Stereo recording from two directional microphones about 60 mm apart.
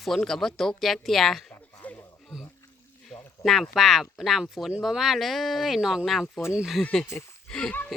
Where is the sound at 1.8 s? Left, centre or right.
Left.